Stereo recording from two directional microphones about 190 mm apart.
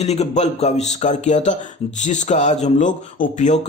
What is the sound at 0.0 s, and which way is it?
A man's voice, 35° left (ahead or behind).